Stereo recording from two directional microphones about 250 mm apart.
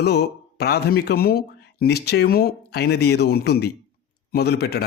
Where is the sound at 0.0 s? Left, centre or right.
Left.